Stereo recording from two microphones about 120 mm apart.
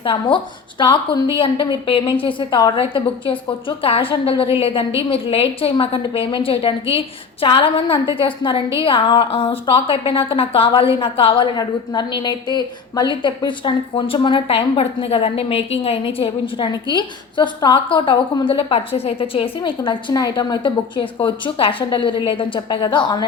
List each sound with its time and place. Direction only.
0.0 s a woman's voice: 45° left (ahead or behind)
11.5 s a woman's voice: 35° left (ahead or behind)